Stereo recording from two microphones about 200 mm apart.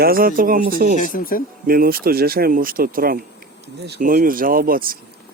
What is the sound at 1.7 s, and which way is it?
Speech, 45° right (ahead or behind).